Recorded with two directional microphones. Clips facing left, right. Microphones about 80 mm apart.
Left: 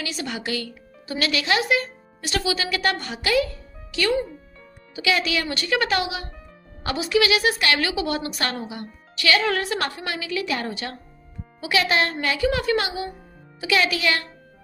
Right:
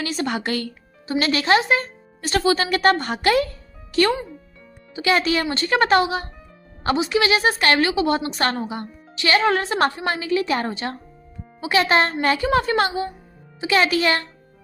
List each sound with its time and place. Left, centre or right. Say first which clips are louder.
0.0 s a woman's voice: right 5 dB; right
1.0 s a woman's voice: right 4 dB; right